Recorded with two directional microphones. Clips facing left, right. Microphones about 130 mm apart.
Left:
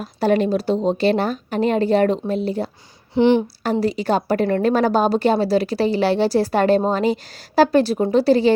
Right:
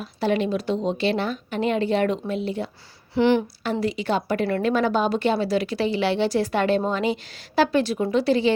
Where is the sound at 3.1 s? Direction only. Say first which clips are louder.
Left 4 dB; 20° left (ahead or behind).